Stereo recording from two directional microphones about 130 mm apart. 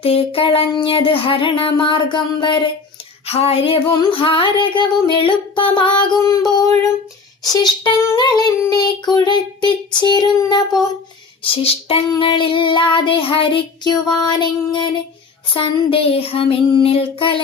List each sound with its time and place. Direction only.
0.0 s female singing: 45° left (ahead or behind)
3.2 s child singing: 50° left (ahead or behind)
4.1 s female singing: 45° left (ahead or behind)
11.5 s child singing: 50° left (ahead or behind)
12.2 s female singing: 40° left (ahead or behind)
15.5 s child singing: 45° left (ahead or behind)